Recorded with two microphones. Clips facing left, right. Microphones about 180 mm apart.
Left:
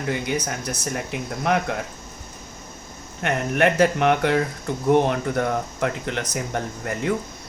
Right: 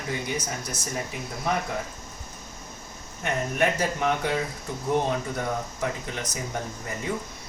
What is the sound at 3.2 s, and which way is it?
Speech, 65° left (ahead or behind).